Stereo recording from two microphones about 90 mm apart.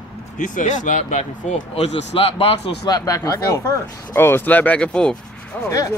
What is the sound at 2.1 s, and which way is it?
Speech, 90° left.